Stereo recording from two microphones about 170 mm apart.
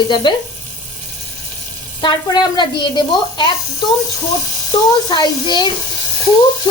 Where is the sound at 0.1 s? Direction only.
25° left (ahead or behind).